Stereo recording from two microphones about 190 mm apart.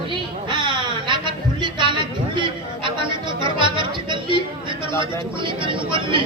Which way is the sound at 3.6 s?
25° right (ahead or behind).